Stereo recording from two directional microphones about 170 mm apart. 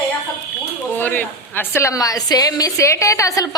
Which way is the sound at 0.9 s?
10° left (ahead or behind).